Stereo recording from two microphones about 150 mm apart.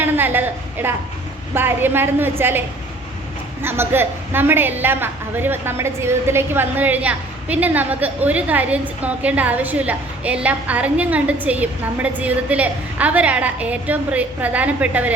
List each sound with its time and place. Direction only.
0.0 s a woman's voice: 10° right (ahead or behind)